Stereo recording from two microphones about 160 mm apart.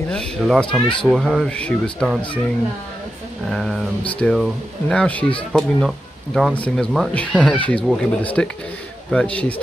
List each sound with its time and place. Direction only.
0.1 s speech: 5° left (ahead or behind)
3.4 s speech: centre (ahead or behind)